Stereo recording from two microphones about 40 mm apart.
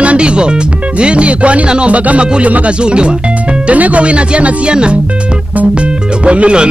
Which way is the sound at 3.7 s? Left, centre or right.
Right.